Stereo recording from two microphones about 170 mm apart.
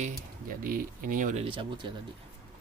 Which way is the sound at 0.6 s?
55° right (ahead or behind).